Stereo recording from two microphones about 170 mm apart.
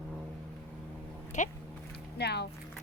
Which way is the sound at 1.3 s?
45° left (ahead or behind).